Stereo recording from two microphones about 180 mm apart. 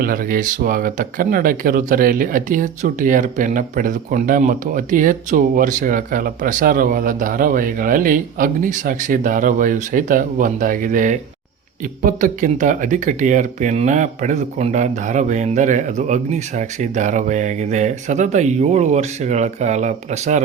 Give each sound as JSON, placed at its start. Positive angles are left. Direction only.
{"t": 0.0, "sound": "speech", "side_deg": -50}